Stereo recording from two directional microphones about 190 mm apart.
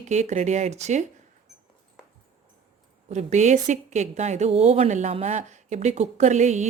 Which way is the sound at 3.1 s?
35° right (ahead or behind).